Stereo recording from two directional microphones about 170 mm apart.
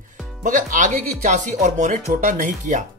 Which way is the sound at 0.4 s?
50° right (ahead or behind).